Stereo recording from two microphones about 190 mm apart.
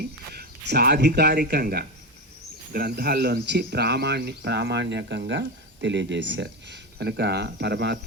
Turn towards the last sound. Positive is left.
turn(degrees=-60)  # may be behind; listen again after turning